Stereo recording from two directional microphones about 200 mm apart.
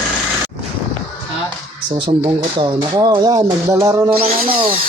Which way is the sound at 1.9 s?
25° right (ahead or behind).